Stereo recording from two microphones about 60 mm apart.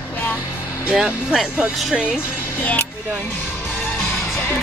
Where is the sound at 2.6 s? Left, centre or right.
Left.